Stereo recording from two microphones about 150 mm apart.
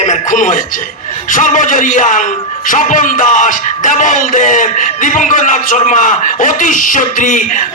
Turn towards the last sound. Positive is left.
turn(degrees=60)  # may be behind; listen again after turning